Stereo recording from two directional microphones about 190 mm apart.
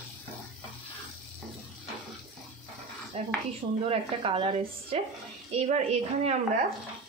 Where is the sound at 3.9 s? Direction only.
30° right (ahead or behind).